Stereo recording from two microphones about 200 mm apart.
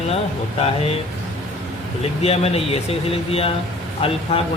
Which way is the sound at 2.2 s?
30° left (ahead or behind).